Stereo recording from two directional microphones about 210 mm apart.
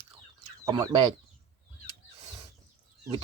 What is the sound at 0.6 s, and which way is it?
Speech, 20° right (ahead or behind).